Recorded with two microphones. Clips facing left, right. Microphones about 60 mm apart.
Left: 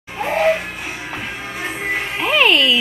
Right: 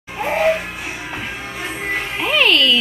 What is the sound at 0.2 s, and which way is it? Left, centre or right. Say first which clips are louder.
Music: even; centre.